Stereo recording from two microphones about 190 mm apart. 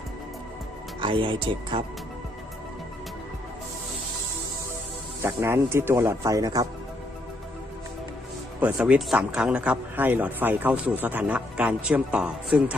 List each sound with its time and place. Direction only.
1.0 s speech: 25° right (ahead or behind)
5.2 s a man's voice: 15° right (ahead or behind)
8.6 s a man's voice: 5° right (ahead or behind)